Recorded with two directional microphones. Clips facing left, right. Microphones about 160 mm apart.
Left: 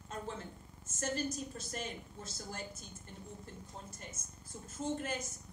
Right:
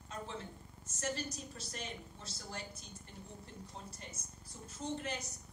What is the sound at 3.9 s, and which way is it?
A woman's voice, 50° left (ahead or behind).